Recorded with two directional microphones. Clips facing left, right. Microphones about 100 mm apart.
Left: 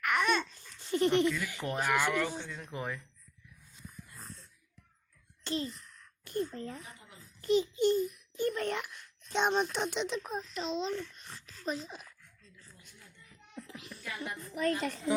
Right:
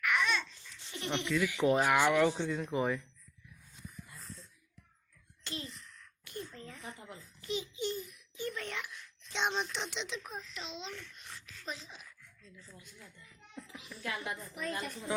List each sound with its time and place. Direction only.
0.0 s babbling: 45° left (ahead or behind)
1.6 s speech: 15° right (ahead or behind)
5.4 s a sound: 35° left (ahead or behind)
7.4 s a child's voice: 45° left (ahead or behind)
13.7 s a sound: 55° left (ahead or behind)
14.5 s a woman's voice: 65° left (ahead or behind)